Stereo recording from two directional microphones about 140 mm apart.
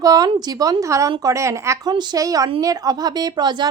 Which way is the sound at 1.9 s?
30° right (ahead or behind).